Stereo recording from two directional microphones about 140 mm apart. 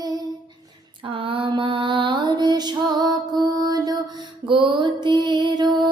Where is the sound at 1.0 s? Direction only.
35° right (ahead or behind).